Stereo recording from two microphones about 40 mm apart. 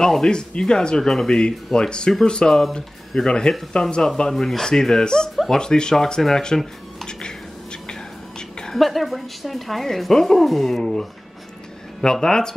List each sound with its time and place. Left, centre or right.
0.0 s speech: centre
4.3 s speech: centre
7.1 s finger snapping: centre
7.9 s whispering: centre
8.7 s a woman's voice: centre